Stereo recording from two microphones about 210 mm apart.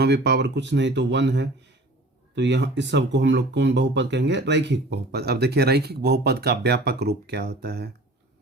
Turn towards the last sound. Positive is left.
turn(degrees=-50)  # may be behind; listen again after turning